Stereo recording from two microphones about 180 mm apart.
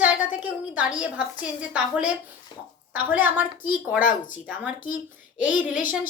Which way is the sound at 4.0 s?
45° left (ahead or behind).